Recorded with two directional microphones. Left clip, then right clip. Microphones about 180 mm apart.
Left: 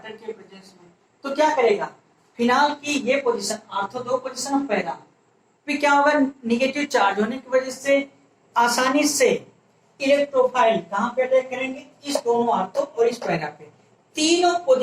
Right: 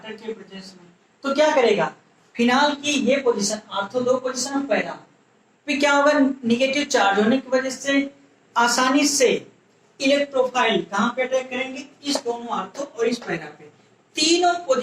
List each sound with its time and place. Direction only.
0.0 s a man's voice: 5° right (ahead or behind)
3.9 s speech: 40° right (ahead or behind)
5.6 s a woman's voice: 10° right (ahead or behind)